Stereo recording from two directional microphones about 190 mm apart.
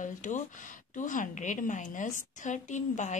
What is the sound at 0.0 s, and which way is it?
A woman's voice, 40° left (ahead or behind).